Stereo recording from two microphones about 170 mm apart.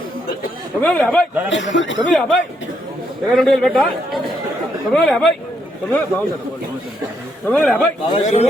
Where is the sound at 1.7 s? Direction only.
90° left.